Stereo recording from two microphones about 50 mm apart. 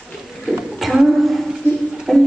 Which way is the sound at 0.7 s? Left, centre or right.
Centre.